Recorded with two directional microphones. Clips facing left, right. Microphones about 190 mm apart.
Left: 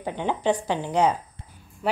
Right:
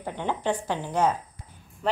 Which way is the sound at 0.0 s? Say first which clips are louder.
Left 3 dB; 15° left (ahead or behind).